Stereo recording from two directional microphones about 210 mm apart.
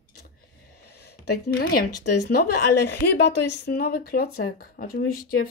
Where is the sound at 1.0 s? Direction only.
50° left (ahead or behind).